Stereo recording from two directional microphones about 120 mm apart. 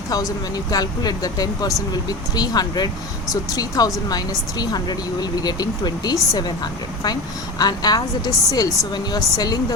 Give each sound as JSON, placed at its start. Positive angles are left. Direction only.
{"t": 0.5, "sound": "speech", "side_deg": 30}